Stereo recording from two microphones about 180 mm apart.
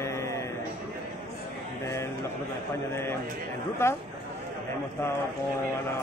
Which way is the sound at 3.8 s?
15° left (ahead or behind).